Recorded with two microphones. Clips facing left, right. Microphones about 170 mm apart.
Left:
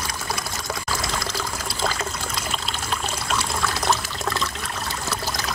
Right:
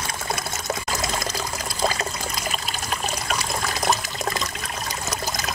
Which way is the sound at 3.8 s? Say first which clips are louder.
Right 2 dB; 20° right (ahead or behind).